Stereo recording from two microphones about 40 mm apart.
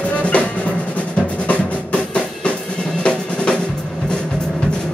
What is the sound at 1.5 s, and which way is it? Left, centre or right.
Music, left.